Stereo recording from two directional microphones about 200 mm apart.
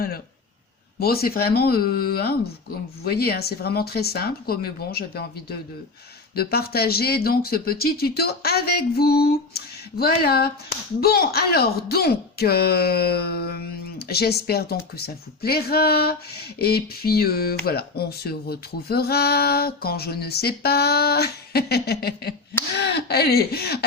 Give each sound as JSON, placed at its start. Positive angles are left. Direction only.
{"t": 0.9, "sound": "speech", "side_deg": 50}